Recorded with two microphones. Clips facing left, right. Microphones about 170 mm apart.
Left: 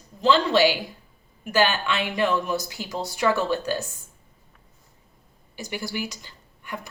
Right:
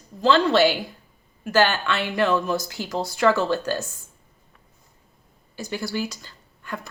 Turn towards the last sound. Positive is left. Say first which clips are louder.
# right 2 dB
turn(degrees=15)  # may be behind; listen again after turning